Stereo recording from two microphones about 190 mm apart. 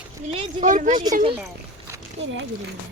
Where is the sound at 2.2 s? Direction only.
70° right (ahead or behind).